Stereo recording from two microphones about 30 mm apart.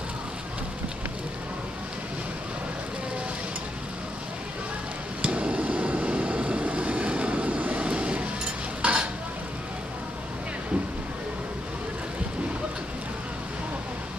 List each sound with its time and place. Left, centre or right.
5.2 s vehicle: right
8.8 s stir: right